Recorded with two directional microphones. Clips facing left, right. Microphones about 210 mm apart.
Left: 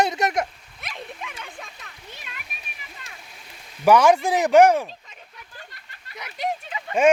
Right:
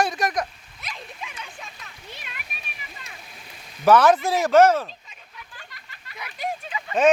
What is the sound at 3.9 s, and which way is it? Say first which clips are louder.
Speech: even; 15° left (ahead or behind).